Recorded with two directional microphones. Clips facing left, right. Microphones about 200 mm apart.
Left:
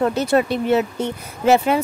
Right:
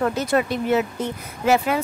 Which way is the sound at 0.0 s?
30° left (ahead or behind).